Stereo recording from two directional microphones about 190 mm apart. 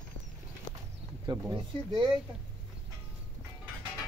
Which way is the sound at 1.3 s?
25° right (ahead or behind).